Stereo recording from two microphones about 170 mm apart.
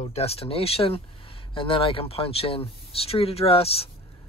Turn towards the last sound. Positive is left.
turn(degrees=35)  # may be behind; listen again after turning